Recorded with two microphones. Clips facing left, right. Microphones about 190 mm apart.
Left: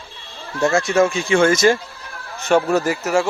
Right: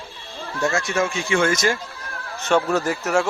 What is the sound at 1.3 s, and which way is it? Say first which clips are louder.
Speech: left 6 dB; 35° left (ahead or behind).